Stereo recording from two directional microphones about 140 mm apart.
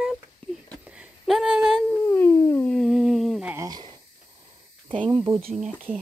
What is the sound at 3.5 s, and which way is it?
Speech, 30° right (ahead or behind).